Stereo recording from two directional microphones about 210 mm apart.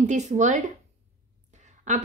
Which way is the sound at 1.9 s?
35° right (ahead or behind).